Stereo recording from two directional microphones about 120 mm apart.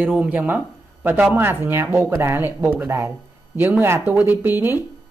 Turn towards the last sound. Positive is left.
turn(degrees=-20)  # may be behind; listen again after turning